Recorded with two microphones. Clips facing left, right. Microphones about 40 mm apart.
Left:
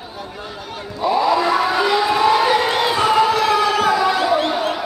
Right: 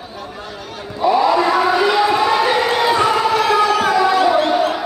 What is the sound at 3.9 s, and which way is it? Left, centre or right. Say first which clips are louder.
Music: right 2 dB; centre.